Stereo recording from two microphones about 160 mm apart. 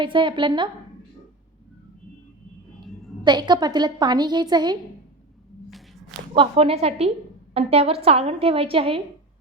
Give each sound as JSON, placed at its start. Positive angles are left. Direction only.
{"t": 0.0, "sound": "a woman's voice", "side_deg": -30}
{"t": 3.2, "sound": "a woman's voice", "side_deg": -25}
{"t": 6.3, "sound": "a woman's voice", "side_deg": -35}